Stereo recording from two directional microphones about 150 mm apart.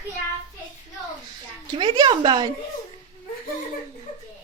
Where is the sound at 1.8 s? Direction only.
30° right (ahead or behind).